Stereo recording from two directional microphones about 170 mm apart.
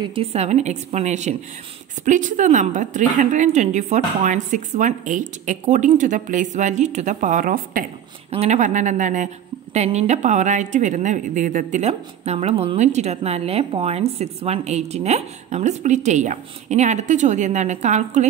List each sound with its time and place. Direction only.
0.0 s a woman's voice: 35° right (ahead or behind); by 7.8 s 55° right (ahead or behind)
8.3 s a woman's voice: 40° right (ahead or behind)